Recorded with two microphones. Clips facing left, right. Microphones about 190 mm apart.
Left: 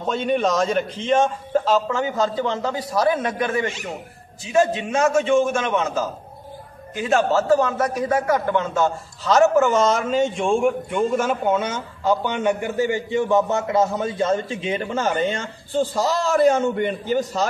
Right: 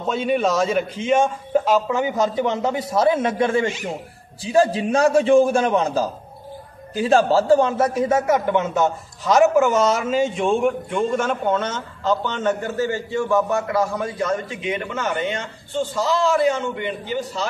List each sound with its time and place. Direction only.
0.1 s a man's voice: 5° right (ahead or behind); by 17.5 s 45° left (ahead or behind)